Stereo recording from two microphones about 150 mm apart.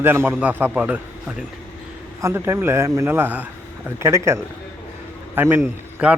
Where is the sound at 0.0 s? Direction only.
15° right (ahead or behind).